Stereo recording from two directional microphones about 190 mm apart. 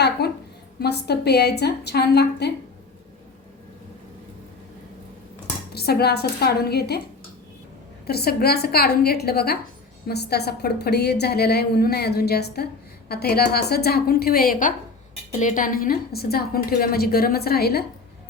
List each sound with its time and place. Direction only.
0.2 s a sound: 60° left (ahead or behind)
0.8 s a woman's voice: 60° left (ahead or behind)
5.7 s a woman's voice: 55° left (ahead or behind)
8.0 s a woman's voice: 55° left (ahead or behind)